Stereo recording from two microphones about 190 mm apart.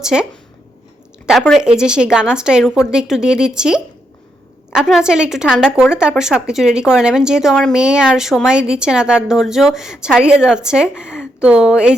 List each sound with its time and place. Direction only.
0.0 s speech: 5° right (ahead or behind)
1.3 s speech: centre (ahead or behind)